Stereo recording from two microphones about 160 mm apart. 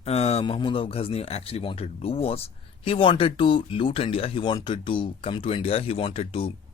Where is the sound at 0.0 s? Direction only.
40° left (ahead or behind).